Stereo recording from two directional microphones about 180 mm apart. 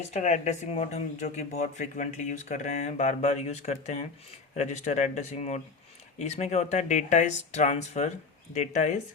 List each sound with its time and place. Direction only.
0.0 s speech: 40° left (ahead or behind)